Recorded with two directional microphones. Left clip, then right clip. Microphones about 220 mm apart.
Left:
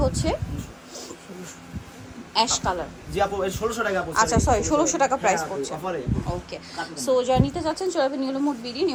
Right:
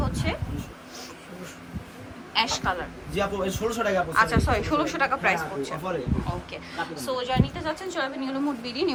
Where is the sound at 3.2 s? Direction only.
Centre (ahead or behind).